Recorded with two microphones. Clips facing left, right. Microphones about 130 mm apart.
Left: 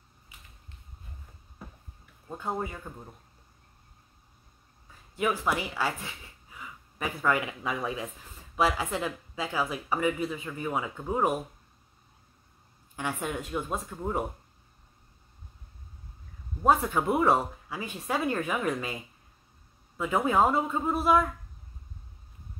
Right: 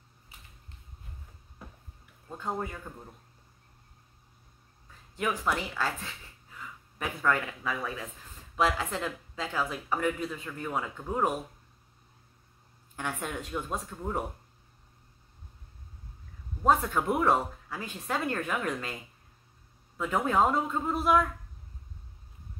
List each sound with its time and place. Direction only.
2.2 s speech: 10° left (ahead or behind)
5.1 s speech: 5° left (ahead or behind)
7.6 s speech: 20° left (ahead or behind)
12.9 s speech: 5° left (ahead or behind)
16.6 s speech: 10° left (ahead or behind)
20.0 s a man's voice: 5° left (ahead or behind)